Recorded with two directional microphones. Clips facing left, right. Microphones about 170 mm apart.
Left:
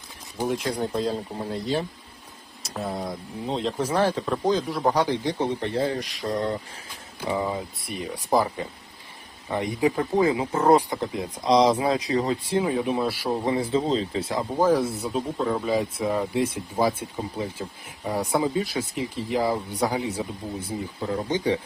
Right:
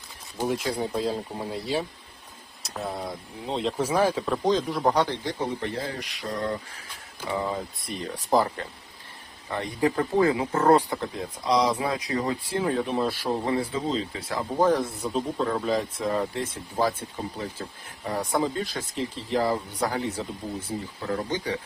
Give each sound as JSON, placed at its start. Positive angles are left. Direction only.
{"t": 0.4, "sound": "speech", "side_deg": 0}
{"t": 5.5, "sound": "speech", "side_deg": 30}
{"t": 7.2, "sound": "speech", "side_deg": 10}
{"t": 12.6, "sound": "speech", "side_deg": 10}
{"t": 14.5, "sound": "speech", "side_deg": 5}